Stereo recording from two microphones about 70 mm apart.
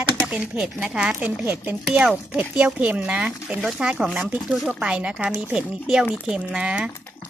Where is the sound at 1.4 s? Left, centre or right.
Right.